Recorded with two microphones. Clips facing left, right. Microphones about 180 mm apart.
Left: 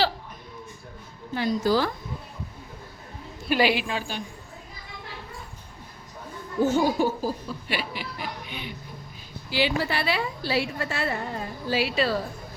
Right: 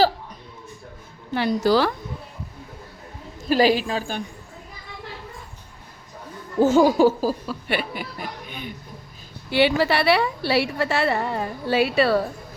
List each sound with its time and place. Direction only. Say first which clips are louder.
1.3 s a woman's voice: right 4 dB; 70° right (ahead or behind)
3.5 s a woman's voice: right 5 dB; 40° right (ahead or behind)
6.6 s speech: right 6 dB; 90° right
7.8 s speech: right 3 dB; 50° right (ahead or behind)
9.5 s a woman's voice: right 6 dB; 65° right (ahead or behind)